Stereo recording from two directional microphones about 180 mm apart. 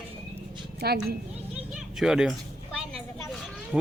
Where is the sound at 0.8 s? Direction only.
60° right (ahead or behind).